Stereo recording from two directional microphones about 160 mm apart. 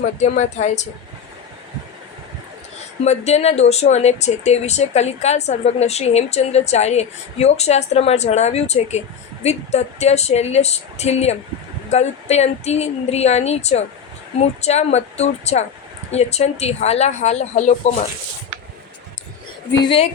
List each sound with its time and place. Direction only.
0.2 s speech: 45° left (ahead or behind)
3.0 s speech: 45° left (ahead or behind)
19.8 s speech: 35° left (ahead or behind)